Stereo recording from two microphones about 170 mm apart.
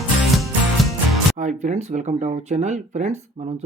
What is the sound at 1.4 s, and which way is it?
Speech, 45° right (ahead or behind).